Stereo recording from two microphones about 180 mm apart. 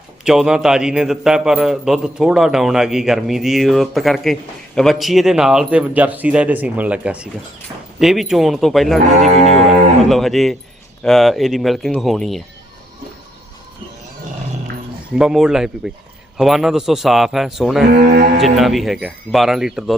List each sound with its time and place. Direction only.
0.3 s a man's voice: 5° right (ahead or behind)
9.2 s music: 35° right (ahead or behind)
10.0 s a man's voice: centre (ahead or behind)
15.1 s a man's voice: 5° right (ahead or behind)
18.0 s mantra: 55° right (ahead or behind)
18.4 s a man's voice: centre (ahead or behind)